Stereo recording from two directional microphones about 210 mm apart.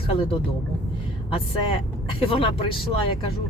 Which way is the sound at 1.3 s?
25° left (ahead or behind).